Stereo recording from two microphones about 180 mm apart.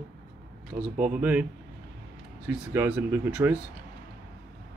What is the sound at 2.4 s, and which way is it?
Speech, 10° right (ahead or behind).